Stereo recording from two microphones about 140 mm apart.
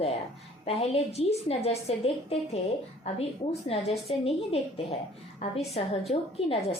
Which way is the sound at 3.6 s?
45° left (ahead or behind).